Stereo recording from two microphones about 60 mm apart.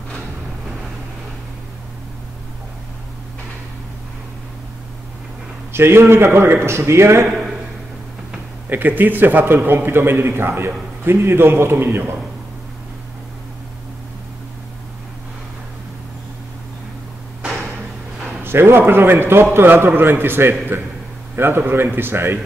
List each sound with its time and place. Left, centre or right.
5.7 s a man's voice: right
7.2 s a man's voice: centre
8.6 s a man's voice: right
18.4 s a man's voice: right